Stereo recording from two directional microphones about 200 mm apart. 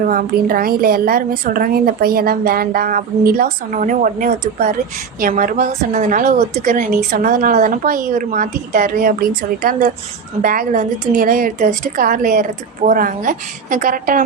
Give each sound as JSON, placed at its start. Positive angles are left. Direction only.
{"t": 0.1, "sound": "a woman's voice", "side_deg": -45}